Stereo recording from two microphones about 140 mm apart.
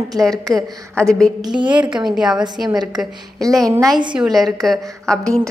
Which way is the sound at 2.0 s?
5° right (ahead or behind).